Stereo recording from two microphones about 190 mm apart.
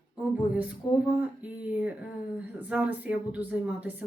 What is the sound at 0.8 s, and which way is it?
Speech, 20° left (ahead or behind).